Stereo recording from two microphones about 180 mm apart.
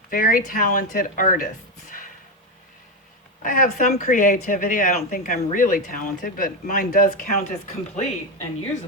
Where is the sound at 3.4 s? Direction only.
50° left (ahead or behind).